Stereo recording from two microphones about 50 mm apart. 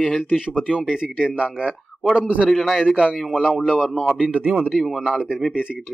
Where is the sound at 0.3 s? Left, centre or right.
Centre.